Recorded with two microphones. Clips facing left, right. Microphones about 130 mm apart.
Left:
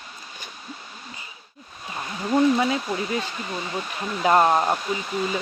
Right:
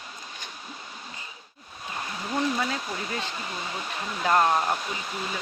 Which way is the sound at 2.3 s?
20° left (ahead or behind).